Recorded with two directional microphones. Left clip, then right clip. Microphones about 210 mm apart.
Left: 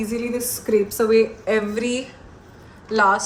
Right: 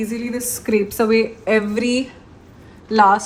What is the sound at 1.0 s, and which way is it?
A woman's voice, 35° right (ahead or behind).